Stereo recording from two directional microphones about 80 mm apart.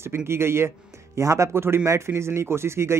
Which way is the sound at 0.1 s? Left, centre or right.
Right.